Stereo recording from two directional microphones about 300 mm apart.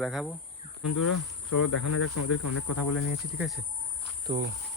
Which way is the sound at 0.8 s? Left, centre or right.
Left.